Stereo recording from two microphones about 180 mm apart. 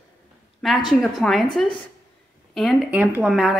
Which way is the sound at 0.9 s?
Centre (ahead or behind).